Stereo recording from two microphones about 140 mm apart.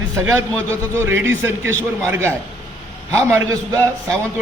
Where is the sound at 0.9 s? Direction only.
15° right (ahead or behind).